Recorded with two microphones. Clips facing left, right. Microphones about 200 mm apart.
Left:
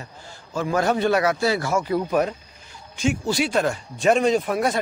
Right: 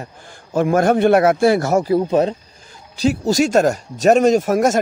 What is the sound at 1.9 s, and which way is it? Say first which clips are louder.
Speech: right 4 dB; 25° right (ahead or behind).